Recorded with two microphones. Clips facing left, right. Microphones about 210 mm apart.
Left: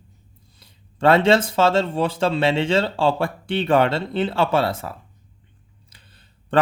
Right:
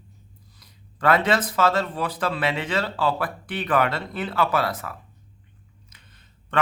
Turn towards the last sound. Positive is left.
turn(degrees=30)  # may be behind; listen again after turning